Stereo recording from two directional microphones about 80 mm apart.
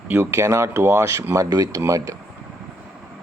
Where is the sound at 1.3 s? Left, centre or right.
Right.